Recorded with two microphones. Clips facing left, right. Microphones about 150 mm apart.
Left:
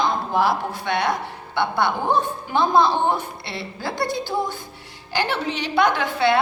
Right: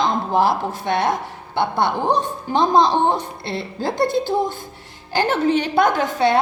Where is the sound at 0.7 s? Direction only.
45° right (ahead or behind).